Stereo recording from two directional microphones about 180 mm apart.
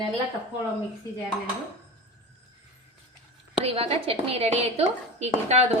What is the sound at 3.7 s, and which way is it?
A woman's voice, 35° right (ahead or behind).